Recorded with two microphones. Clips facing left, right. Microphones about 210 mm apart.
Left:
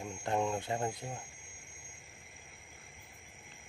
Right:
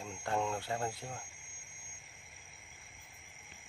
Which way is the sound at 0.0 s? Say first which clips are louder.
Left 2 dB; 20° left (ahead or behind).